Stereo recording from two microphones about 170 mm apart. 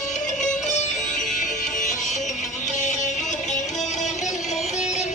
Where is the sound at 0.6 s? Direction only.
45° left (ahead or behind).